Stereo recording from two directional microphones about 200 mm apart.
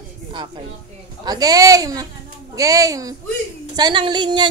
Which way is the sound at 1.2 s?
20° right (ahead or behind).